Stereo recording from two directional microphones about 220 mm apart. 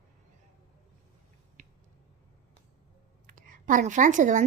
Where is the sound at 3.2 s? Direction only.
40° right (ahead or behind).